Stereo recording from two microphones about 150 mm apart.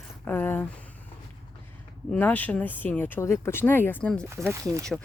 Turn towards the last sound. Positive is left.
turn(degrees=-20)  # may be behind; listen again after turning